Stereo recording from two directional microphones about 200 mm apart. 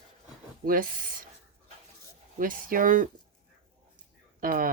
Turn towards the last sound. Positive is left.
turn(degrees=-45)  # may be behind; listen again after turning